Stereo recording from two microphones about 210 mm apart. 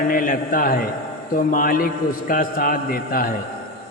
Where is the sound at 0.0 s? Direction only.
40° left (ahead or behind).